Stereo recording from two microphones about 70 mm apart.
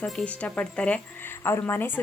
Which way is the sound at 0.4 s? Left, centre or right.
Centre.